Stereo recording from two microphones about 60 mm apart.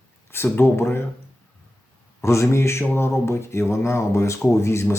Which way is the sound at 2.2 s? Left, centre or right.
Left.